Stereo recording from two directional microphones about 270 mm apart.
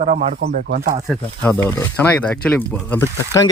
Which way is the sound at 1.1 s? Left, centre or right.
Centre.